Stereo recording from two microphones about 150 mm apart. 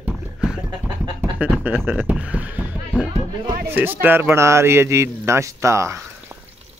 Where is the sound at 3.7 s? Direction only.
15° right (ahead or behind).